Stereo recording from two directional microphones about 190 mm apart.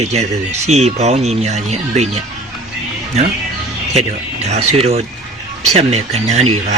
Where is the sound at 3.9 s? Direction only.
35° right (ahead or behind).